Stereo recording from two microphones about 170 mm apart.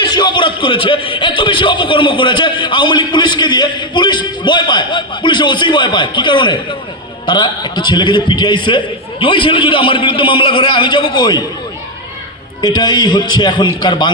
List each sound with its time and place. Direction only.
0.0 s a man's voice: 25° left (ahead or behind)
12.6 s a man's voice: 25° left (ahead or behind)